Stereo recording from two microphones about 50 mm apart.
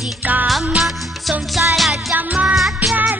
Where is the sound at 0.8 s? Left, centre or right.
Centre.